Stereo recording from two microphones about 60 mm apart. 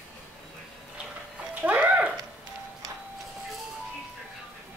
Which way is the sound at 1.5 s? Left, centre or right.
Right.